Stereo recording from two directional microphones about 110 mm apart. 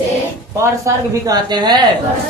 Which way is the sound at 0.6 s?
30° right (ahead or behind).